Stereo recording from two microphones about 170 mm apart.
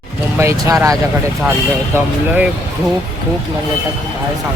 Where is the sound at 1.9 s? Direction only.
10° right (ahead or behind).